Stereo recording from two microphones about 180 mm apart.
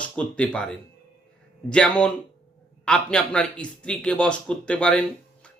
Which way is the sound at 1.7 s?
5° left (ahead or behind).